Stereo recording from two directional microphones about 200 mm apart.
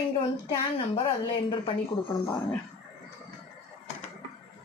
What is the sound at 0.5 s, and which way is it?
Speech, 30° left (ahead or behind).